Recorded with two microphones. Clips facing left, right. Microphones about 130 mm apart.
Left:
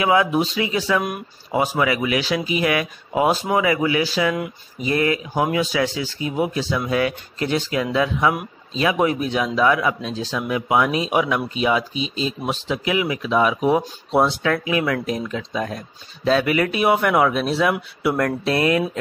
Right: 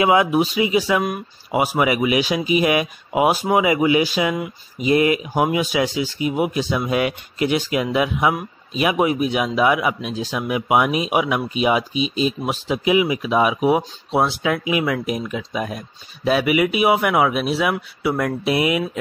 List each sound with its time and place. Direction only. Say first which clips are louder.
0.0 s speech: right 2 dB; 20° right (ahead or behind)